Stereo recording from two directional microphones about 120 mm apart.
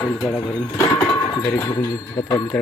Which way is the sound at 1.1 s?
30° left (ahead or behind).